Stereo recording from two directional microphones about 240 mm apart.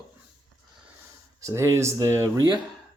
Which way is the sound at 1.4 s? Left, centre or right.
Centre.